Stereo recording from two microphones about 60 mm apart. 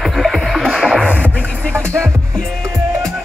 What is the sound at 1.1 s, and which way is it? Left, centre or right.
Music, left.